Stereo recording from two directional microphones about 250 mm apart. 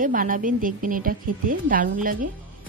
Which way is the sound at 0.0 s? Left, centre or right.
Right.